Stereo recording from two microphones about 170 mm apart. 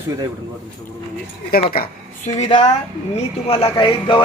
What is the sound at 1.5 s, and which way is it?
Speech, 65° left (ahead or behind).